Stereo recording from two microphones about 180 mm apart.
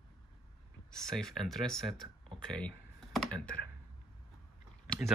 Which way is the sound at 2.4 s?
5° left (ahead or behind).